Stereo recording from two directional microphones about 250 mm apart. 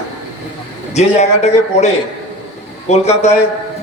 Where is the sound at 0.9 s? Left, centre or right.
Left.